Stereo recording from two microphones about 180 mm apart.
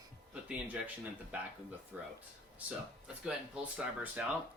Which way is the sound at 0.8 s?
10° right (ahead or behind).